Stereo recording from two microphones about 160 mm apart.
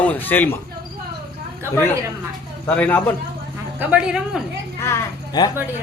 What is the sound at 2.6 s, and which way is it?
Speech, 10° left (ahead or behind).